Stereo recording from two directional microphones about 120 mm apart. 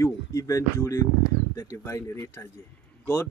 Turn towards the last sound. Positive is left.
turn(degrees=20)  # may be behind; listen again after turning